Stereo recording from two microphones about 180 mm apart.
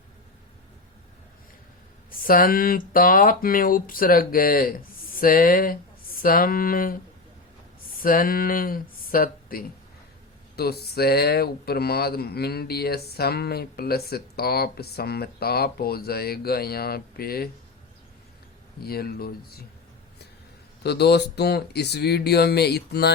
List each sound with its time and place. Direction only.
2.0 s speech: 50° left (ahead or behind)
7.9 s speech: 50° left (ahead or behind)
18.8 s speech: 60° left (ahead or behind)
20.8 s speech: 65° left (ahead or behind)